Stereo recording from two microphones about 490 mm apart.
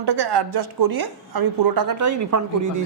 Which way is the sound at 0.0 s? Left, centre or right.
Right.